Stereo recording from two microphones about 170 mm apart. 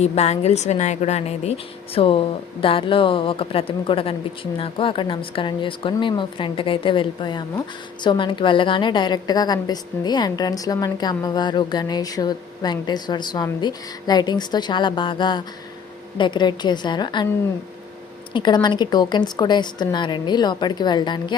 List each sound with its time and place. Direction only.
0.0 s a woman's voice: 40° left (ahead or behind)
18.3 s a woman's voice: 25° left (ahead or behind)